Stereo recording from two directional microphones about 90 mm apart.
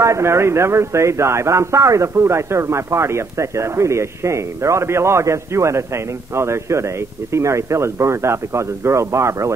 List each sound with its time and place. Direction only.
0.0 s a man's voice: 30° right (ahead or behind)